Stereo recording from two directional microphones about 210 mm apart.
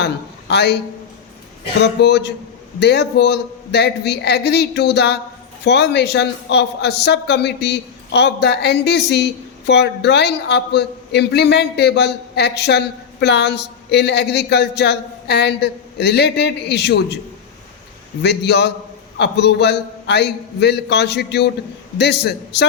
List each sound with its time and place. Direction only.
0.0 s a man's voice: 55° left (ahead or behind)
1.8 s a man's voice: 55° left (ahead or behind)
18.2 s a man's voice: 55° left (ahead or behind)